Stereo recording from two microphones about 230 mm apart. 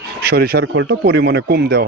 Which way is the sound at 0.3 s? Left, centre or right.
Right.